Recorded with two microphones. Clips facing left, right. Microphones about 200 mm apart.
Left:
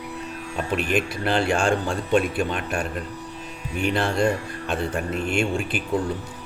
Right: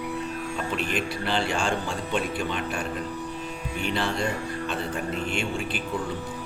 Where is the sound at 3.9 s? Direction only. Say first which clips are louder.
Left 6 dB; 55° left (ahead or behind).